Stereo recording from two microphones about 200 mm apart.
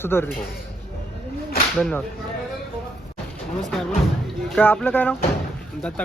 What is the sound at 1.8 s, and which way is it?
Speech, 5° left (ahead or behind).